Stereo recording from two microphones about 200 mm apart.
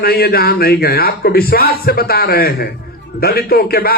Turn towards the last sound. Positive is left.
turn(degrees=50)  # may be behind; listen again after turning